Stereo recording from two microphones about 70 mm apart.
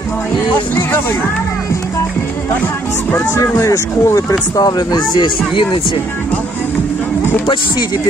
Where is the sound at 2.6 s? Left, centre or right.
Left.